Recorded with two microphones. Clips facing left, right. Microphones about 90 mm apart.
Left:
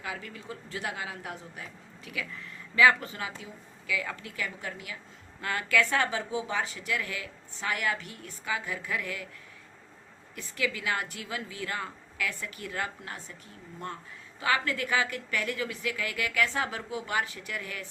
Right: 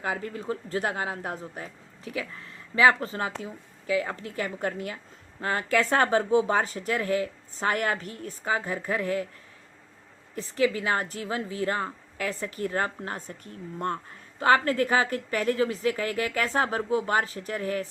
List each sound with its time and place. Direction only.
0.0 s a woman's voice: 40° right (ahead or behind)
5.4 s a woman's voice: 35° right (ahead or behind)
10.3 s a woman's voice: 35° right (ahead or behind)